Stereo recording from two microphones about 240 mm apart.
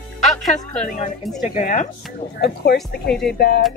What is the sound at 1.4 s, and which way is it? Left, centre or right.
Speech, left.